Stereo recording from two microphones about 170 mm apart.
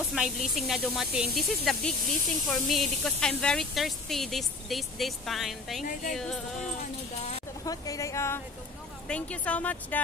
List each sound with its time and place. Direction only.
0.1 s speech: centre (ahead or behind)
7.6 s a woman's voice: 20° left (ahead or behind)